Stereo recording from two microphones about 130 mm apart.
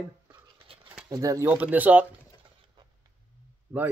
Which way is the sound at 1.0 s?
30° right (ahead or behind).